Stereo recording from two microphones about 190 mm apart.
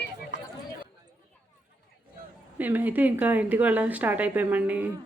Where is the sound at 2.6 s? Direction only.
10° right (ahead or behind).